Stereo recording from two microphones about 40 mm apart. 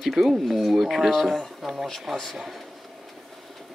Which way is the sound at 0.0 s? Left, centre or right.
Centre.